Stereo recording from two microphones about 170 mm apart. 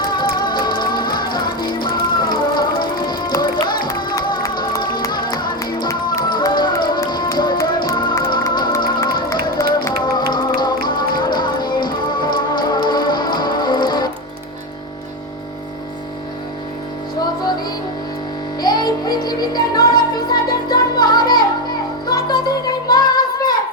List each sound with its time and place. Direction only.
0.1 s music: 25° left (ahead or behind)
18.6 s music: 25° left (ahead or behind)